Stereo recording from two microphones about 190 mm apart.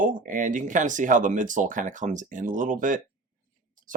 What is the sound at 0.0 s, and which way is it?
Speech, 45° right (ahead or behind).